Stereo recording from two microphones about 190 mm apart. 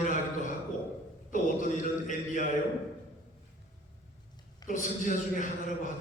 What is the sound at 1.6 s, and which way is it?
Speech, 45° left (ahead or behind).